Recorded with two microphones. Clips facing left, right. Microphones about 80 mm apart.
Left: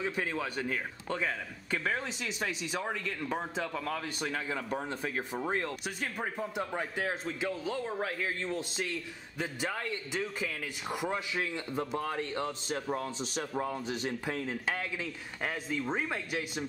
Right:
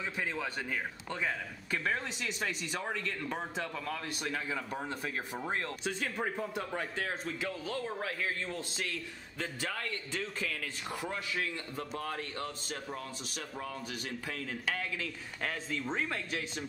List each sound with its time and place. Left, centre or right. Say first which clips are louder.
1.2 s speech: left 1 dB; centre
5.4 s speech: left 2 dB; centre